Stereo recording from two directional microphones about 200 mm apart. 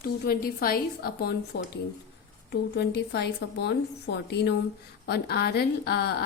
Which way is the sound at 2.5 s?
55° left (ahead or behind).